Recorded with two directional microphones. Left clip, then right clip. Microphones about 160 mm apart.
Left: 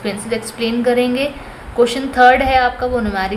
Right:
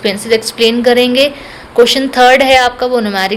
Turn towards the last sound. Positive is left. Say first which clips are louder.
# right 6 dB
turn(degrees=-45)  # may be behind; listen again after turning